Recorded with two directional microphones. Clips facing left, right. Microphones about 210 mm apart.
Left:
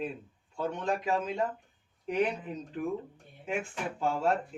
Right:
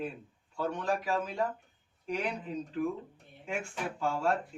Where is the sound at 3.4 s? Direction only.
20° left (ahead or behind).